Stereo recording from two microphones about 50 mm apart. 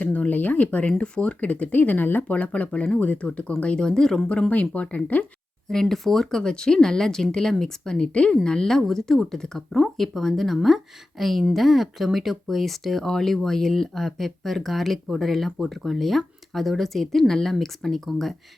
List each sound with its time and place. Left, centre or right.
0.0 s a sound: left
0.9 s speech: centre
4.3 s speech: left
5.6 s speech: centre